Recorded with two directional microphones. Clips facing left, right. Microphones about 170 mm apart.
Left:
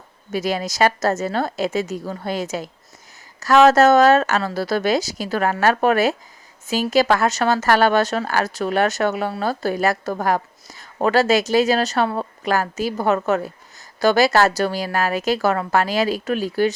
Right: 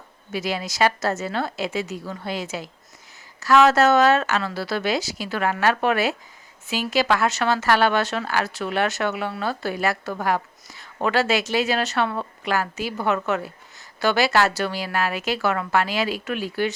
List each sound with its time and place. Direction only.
0.3 s a woman's voice: 45° left (ahead or behind)